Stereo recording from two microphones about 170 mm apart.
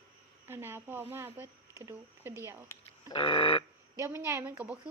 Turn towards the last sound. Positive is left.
turn(degrees=-10)  # may be behind; listen again after turning